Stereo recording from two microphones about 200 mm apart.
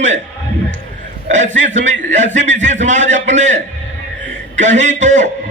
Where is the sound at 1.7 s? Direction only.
35° right (ahead or behind).